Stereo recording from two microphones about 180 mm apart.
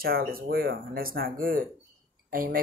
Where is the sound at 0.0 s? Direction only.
55° right (ahead or behind).